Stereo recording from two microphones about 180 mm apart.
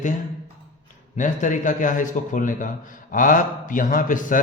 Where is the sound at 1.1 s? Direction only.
45° left (ahead or behind).